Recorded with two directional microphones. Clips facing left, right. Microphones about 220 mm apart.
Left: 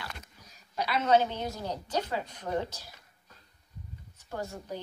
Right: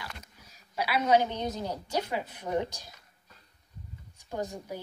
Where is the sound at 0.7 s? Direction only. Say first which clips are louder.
Even; 10° right (ahead or behind).